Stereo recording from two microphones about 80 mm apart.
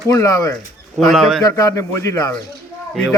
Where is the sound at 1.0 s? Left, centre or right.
Centre.